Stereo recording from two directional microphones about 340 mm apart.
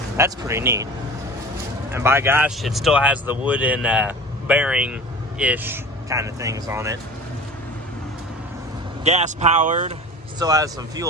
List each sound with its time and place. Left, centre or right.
0.2 s speech: centre
1.9 s speech: centre
9.0 s speech: centre